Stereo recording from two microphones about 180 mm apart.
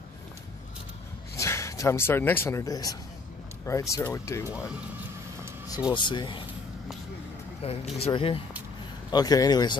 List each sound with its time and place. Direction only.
1.3 s speech: 15° left (ahead or behind)
5.9 s speech: 25° left (ahead or behind)
7.6 s speech: 35° left (ahead or behind)